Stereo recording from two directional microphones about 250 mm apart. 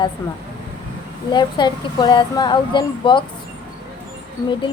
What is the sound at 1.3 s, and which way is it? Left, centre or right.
A woman's voice, centre.